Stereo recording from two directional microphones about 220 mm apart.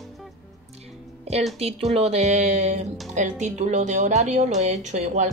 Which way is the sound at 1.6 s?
30° right (ahead or behind).